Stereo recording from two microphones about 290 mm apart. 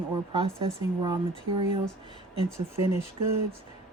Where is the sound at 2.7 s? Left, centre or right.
Right.